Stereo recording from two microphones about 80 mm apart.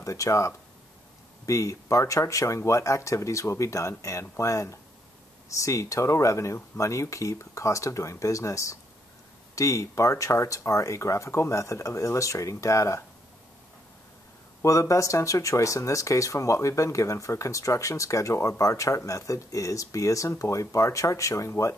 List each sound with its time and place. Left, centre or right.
0.0 s speech: left
14.6 s speech: left